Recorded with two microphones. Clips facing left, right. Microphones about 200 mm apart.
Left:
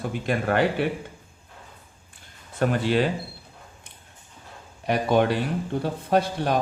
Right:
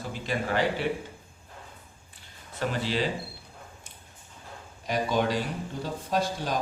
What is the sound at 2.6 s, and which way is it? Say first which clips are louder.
Speech: left 6 dB; 55° left (ahead or behind).